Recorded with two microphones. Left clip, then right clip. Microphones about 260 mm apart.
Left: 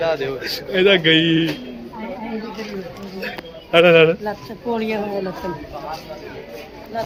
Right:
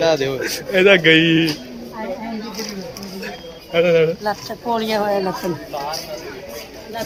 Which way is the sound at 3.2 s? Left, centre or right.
Centre.